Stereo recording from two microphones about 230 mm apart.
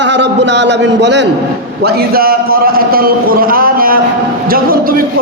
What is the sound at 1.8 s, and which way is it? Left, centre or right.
A man's voice, right.